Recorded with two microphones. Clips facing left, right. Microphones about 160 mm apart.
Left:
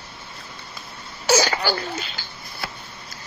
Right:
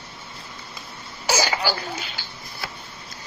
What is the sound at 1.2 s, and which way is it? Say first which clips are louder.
Laughter: left 3 dB; 10° right (ahead or behind).